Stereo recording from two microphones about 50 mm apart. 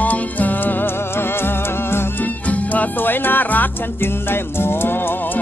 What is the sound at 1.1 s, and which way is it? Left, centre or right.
Music, left.